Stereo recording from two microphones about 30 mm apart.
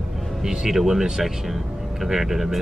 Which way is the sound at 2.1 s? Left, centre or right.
Centre.